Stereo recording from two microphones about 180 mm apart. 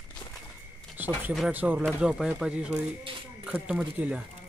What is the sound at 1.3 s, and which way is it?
Speech, 5° right (ahead or behind).